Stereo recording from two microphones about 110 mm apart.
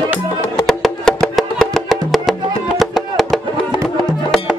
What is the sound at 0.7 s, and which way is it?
Music, 5° left (ahead or behind).